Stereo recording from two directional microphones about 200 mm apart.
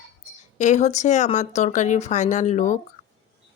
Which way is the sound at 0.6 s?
35° left (ahead or behind).